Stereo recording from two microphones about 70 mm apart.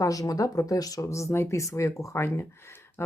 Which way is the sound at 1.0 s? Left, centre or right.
Left.